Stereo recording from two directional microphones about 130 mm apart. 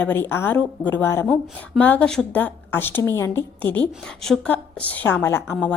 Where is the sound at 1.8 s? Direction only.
10° left (ahead or behind).